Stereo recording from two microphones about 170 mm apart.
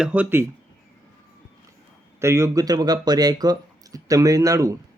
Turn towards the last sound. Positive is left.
turn(degrees=-20)  # may be behind; listen again after turning